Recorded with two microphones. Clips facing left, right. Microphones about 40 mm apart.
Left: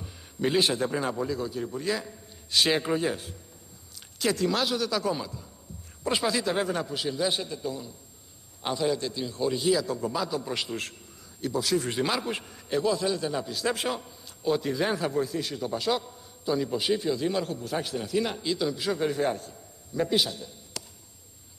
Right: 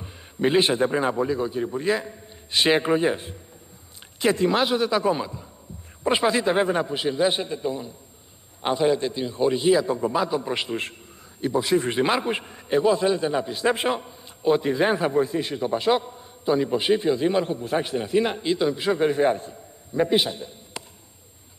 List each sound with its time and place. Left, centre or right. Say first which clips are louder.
0.0 s a man's voice: right 5 dB; right